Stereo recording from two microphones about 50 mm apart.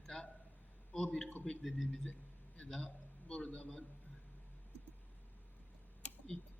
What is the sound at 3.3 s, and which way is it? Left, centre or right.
Speech, left.